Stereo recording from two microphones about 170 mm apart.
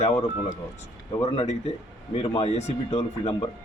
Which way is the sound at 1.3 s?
40° left (ahead or behind).